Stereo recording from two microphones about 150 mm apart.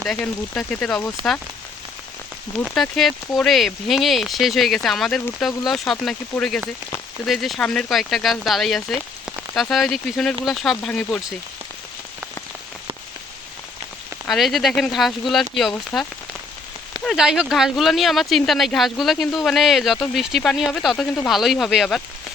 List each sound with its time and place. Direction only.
0.0 s speech: centre (ahead or behind)
2.7 s speech: centre (ahead or behind)
14.3 s speech: centre (ahead or behind)